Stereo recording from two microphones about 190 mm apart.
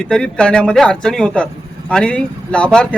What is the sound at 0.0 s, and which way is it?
Speech, 5° left (ahead or behind).